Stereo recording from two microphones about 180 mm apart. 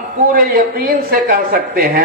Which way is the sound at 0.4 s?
55° right (ahead or behind).